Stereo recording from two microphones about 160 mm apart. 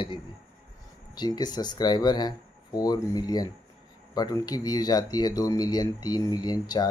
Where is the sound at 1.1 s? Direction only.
25° left (ahead or behind).